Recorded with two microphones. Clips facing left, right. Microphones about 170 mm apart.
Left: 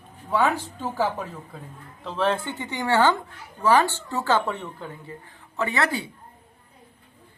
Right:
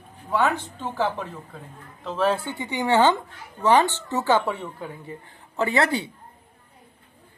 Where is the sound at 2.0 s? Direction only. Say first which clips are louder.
Right 1 dB; centre (ahead or behind).